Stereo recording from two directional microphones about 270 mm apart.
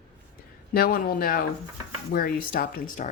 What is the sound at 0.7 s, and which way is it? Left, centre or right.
Speech, left.